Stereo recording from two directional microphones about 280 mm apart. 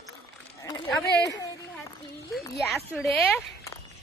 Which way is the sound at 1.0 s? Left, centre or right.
Left.